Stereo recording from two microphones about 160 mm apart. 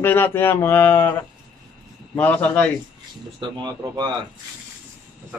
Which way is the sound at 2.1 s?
10° left (ahead or behind).